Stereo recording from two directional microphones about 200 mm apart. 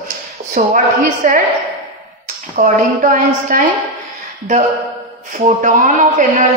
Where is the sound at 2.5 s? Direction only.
40° right (ahead or behind).